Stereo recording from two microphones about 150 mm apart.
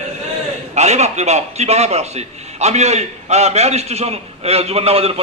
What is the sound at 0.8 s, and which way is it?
A man's voice, 45° right (ahead or behind).